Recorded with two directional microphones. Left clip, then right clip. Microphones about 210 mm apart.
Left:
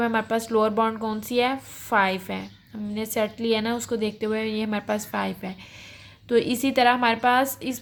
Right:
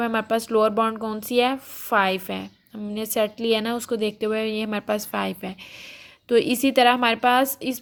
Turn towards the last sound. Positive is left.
turn(degrees=-25)  # may be behind; listen again after turning